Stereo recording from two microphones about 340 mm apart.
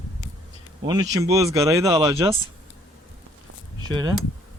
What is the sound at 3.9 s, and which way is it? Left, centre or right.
Speech, centre.